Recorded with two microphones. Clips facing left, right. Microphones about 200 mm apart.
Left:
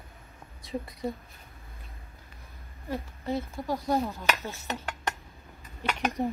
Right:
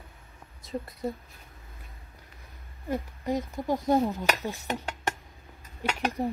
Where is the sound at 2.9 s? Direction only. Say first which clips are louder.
Right 2 dB; 15° right (ahead or behind).